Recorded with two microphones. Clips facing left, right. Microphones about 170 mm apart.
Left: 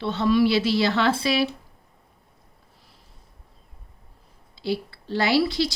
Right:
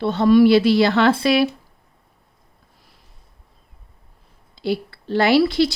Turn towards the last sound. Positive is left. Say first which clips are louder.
# right 6 dB
turn(degrees=-60)  # may be behind; listen again after turning